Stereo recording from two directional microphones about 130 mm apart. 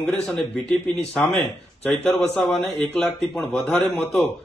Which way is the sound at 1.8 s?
15° left (ahead or behind).